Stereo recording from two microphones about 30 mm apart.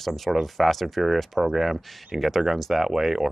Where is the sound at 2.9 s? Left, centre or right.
Centre.